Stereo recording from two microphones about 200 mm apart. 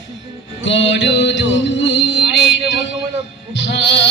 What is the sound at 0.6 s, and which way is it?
Music, 65° left (ahead or behind).